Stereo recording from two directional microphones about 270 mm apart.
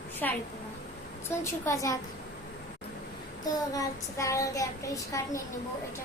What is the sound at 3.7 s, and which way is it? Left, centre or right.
Child singing, centre.